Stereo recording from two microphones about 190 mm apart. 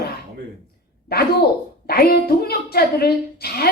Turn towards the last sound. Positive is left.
turn(degrees=55)  # may be behind; listen again after turning